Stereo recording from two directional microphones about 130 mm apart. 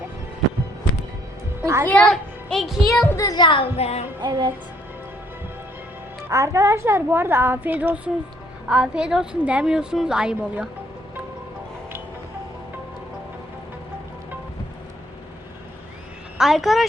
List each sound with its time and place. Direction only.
1.6 s a child's voice: 25° right (ahead or behind)
1.9 s a child's voice: 5° left (ahead or behind)
3.1 s music: 25° left (ahead or behind); by 4.0 s 55° left (ahead or behind)
4.2 s music: 35° right (ahead or behind)
6.2 s a woman's voice: 25° right (ahead or behind); by 10.7 s 5° right (ahead or behind)
16.4 s speech: 5° right (ahead or behind)